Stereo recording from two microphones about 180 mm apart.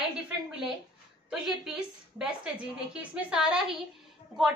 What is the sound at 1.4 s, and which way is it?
A woman's voice, 5° right (ahead or behind).